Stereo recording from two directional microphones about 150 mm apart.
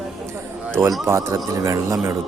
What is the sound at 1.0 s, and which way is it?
Speech, 20° right (ahead or behind).